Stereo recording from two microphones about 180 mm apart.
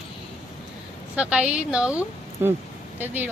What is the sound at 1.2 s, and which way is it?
Speech, 5° right (ahead or behind).